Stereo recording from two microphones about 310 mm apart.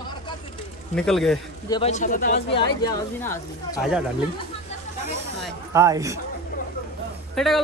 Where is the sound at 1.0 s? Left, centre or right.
Centre.